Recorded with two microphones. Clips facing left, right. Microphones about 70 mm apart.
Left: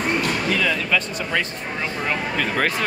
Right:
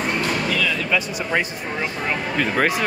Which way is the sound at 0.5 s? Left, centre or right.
Left.